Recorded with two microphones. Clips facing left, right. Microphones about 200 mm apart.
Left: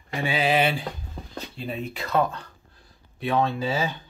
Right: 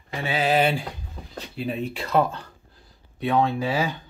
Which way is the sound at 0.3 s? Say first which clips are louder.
Right 1 dB; 40° right (ahead or behind).